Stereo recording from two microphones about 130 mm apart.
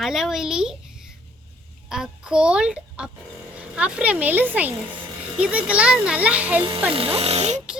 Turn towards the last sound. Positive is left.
turn(degrees=-55)  # may be behind; listen again after turning